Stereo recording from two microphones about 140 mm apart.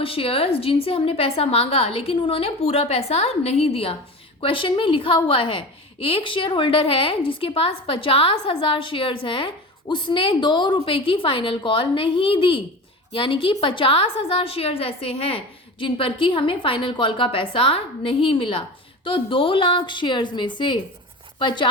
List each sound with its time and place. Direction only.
0.0 s a woman's voice: 40° left (ahead or behind)